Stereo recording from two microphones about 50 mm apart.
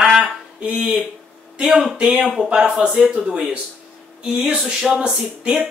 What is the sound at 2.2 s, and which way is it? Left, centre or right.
Speech, centre.